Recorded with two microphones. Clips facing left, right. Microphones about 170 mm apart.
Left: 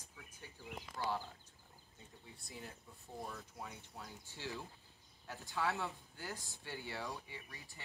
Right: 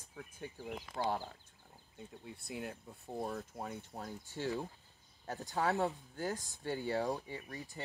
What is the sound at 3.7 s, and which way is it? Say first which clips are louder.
Speech: right 8 dB; 50° right (ahead or behind).